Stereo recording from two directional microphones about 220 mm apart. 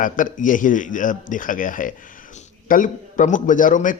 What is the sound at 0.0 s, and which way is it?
A man's voice, 35° left (ahead or behind).